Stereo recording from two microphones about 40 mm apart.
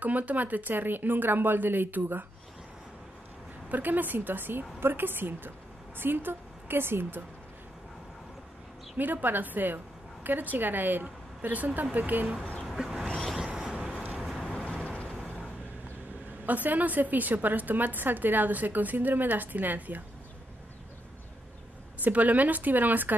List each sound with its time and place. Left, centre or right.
0.0 s a woman's voice: right
3.6 s a woman's voice: right
8.9 s a woman's voice: right
12.6 s a sound: centre
13.5 s a sound: right
14.1 s vehicle: centre
14.5 s vehicle: left
16.4 s a woman's voice: right
22.0 s a woman's voice: right